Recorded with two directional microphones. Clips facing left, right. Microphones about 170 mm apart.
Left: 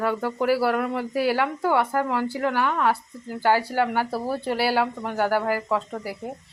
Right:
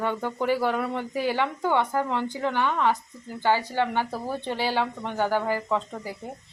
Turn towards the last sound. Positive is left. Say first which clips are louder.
# left 2 dB
turn(degrees=5)  # may be behind; listen again after turning